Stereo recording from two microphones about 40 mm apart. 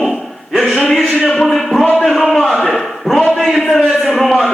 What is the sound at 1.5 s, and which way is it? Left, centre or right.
Speech, centre.